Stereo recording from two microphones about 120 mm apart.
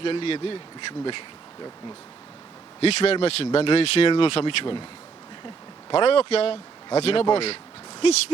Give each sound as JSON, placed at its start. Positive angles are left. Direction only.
{"t": 0.0, "sound": "speech", "side_deg": 50}
{"t": 2.8, "sound": "speech", "side_deg": 60}
{"t": 5.9, "sound": "speech", "side_deg": 55}